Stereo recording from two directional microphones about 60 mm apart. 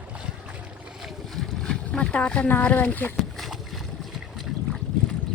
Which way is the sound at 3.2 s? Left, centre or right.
Centre.